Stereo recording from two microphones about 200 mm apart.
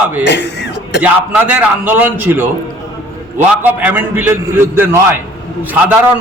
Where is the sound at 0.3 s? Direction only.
60° left (ahead or behind).